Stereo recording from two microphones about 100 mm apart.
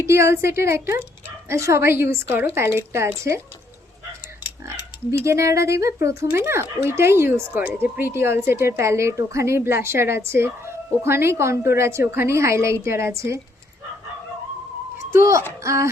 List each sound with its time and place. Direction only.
0.0 s a woman's voice: 30° right (ahead or behind)
4.8 s a woman's voice: 25° right (ahead or behind)
15.1 s speech: 30° right (ahead or behind)